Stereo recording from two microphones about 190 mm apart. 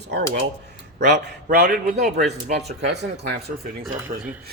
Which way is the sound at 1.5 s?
45° right (ahead or behind).